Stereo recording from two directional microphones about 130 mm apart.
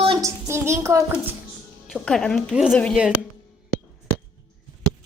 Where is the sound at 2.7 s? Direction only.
10° left (ahead or behind).